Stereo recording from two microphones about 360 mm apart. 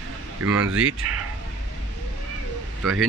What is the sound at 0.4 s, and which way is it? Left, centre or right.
Speech, right.